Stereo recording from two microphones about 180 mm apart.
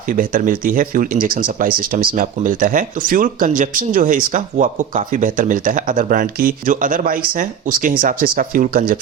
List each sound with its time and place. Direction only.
0.1 s speech: 50° right (ahead or behind)